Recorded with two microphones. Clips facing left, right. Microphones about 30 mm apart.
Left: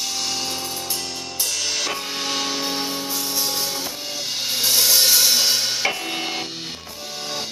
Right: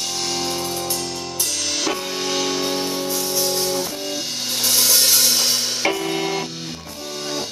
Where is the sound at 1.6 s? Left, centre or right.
Centre.